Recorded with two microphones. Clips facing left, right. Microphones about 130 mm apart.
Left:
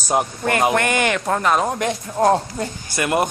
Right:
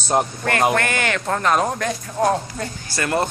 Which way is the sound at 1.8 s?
20° left (ahead or behind).